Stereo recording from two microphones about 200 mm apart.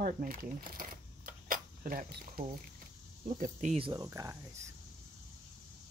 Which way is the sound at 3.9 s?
15° right (ahead or behind).